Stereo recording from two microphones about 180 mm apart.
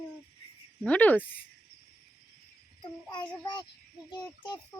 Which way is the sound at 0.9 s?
10° left (ahead or behind).